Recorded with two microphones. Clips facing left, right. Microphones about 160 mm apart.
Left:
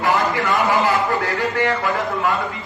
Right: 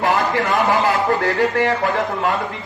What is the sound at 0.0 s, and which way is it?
Speech, 50° right (ahead or behind).